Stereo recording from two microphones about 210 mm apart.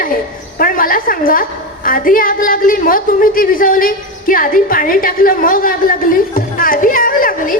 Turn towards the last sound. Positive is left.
turn(degrees=40)  # may be behind; listen again after turning